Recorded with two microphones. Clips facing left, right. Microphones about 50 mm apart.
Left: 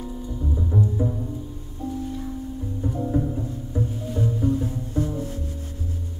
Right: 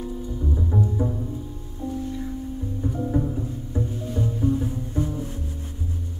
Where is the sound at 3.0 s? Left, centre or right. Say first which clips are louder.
Left 1 dB; centre.